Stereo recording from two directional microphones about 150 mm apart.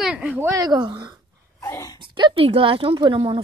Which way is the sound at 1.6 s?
20° left (ahead or behind).